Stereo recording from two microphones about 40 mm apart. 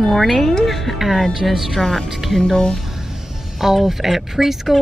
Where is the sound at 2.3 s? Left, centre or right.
Centre.